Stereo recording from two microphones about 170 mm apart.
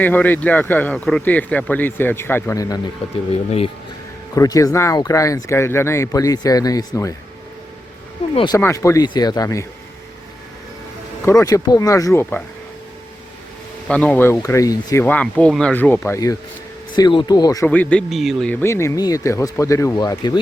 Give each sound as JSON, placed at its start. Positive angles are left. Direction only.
{"t": 0.0, "sound": "speech", "side_deg": 10}
{"t": 3.3, "sound": "speech", "side_deg": 35}
{"t": 4.4, "sound": "speech", "side_deg": 20}
{"t": 8.5, "sound": "speech", "side_deg": 15}
{"t": 11.3, "sound": "speech", "side_deg": 20}
{"t": 13.8, "sound": "speech", "side_deg": 5}
{"t": 15.0, "sound": "speech", "side_deg": 10}
{"t": 17.7, "sound": "speech", "side_deg": 10}